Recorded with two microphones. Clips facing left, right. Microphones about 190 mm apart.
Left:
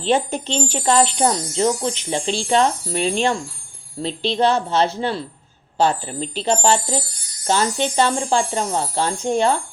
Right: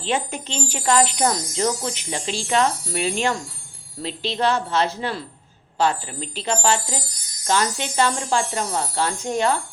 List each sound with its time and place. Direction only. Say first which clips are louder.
0.0 s speech: left 6 dB; 35° left (ahead or behind)